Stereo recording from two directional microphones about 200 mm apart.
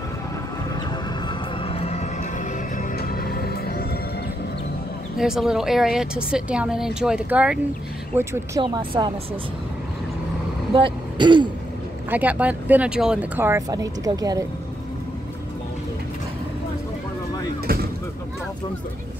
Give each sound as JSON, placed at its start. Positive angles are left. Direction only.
{"t": 1.6, "sound": "music", "side_deg": 30}
{"t": 3.0, "sound": "music", "side_deg": 50}
{"t": 5.1, "sound": "a woman's voice", "side_deg": 0}
{"t": 10.7, "sound": "vehicle", "side_deg": -25}
{"t": 12.1, "sound": "speech", "side_deg": -10}